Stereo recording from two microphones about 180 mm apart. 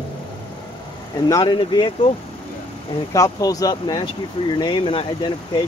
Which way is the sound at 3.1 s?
20° left (ahead or behind).